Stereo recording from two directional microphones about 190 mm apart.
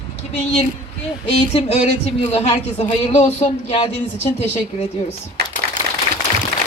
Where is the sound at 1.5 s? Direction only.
35° left (ahead or behind).